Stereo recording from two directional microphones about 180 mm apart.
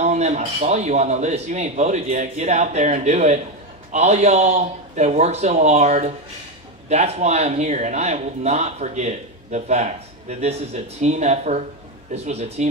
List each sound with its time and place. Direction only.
0.0 s speech: 40° right (ahead or behind)